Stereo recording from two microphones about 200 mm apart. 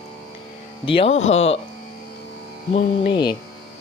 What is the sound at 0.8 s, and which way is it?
Speech, 25° left (ahead or behind).